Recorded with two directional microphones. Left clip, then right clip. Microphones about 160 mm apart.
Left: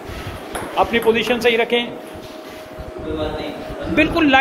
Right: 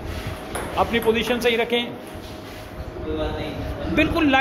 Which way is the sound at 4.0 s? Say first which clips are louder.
Left 4 dB; 25° left (ahead or behind).